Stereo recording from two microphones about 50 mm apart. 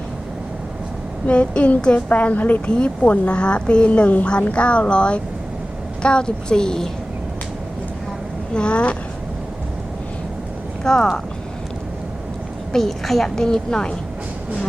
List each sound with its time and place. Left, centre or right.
1.3 s a woman's voice: left
2.6 s a woman's voice: left
8.5 s a woman's voice: left
10.8 s speech: centre
12.7 s a woman's voice: centre